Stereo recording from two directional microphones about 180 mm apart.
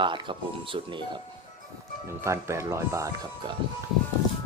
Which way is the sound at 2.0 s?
15° right (ahead or behind).